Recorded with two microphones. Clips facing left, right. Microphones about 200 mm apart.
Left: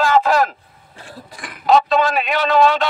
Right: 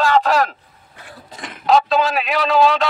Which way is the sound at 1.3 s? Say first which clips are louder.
Right 2 dB; 25° right (ahead or behind).